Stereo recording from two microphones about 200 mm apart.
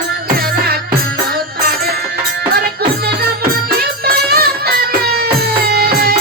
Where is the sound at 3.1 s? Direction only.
50° right (ahead or behind).